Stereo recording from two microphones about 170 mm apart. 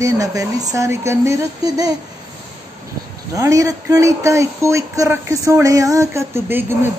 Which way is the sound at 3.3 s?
20° right (ahead or behind).